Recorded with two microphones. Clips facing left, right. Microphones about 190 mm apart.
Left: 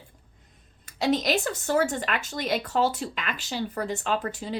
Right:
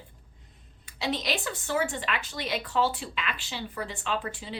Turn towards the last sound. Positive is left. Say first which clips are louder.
# left 4 dB
turn(degrees=45)  # may be behind; listen again after turning